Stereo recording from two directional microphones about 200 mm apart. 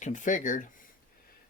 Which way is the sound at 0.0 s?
40° left (ahead or behind).